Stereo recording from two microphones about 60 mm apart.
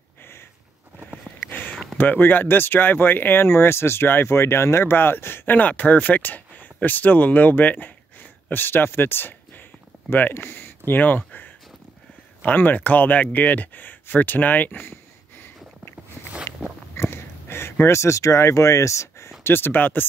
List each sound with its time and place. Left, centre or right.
1.4 s a sound: left
2.0 s speech: left
14.9 s sniff: left
16.6 s biting: right
16.9 s a sound: left
19.4 s speech: left